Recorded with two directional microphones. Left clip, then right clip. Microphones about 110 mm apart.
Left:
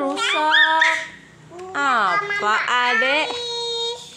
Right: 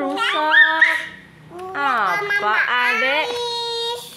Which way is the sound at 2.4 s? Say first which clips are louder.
Right 1 dB; 20° left (ahead or behind).